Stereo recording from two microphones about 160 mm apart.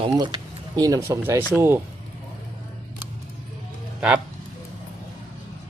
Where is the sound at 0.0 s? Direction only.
30° right (ahead or behind).